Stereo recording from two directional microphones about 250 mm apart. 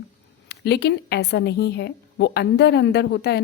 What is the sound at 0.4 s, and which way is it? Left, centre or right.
A woman's voice, left.